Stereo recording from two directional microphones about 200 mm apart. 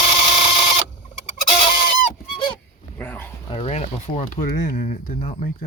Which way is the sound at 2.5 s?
10° left (ahead or behind).